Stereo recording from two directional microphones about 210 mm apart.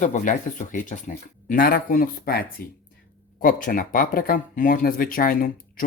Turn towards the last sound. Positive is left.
turn(degrees=40)  # may be behind; listen again after turning